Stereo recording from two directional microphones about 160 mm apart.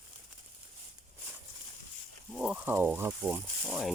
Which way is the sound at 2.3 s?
5° right (ahead or behind).